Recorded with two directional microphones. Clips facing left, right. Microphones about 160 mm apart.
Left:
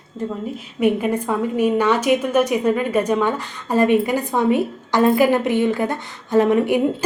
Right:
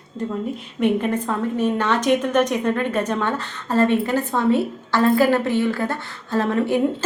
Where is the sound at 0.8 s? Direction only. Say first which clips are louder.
Left 1 dB; 10° left (ahead or behind).